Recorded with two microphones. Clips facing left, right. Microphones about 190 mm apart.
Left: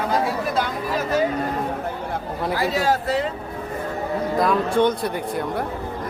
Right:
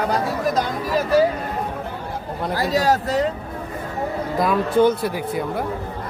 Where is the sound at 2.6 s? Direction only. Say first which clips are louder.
Right 3 dB; 40° right (ahead or behind).